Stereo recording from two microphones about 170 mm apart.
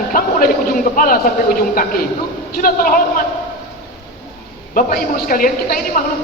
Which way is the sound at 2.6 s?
55° left (ahead or behind).